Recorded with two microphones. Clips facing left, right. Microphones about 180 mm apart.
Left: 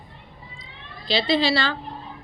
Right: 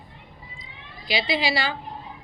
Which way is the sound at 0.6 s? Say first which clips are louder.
Left 2 dB; 15° right (ahead or behind).